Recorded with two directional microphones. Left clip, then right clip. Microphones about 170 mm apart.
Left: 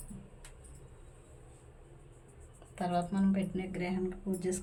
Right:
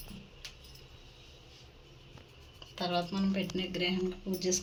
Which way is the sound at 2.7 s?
5° right (ahead or behind).